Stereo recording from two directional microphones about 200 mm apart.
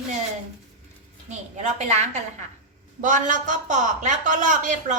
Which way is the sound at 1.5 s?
35° right (ahead or behind).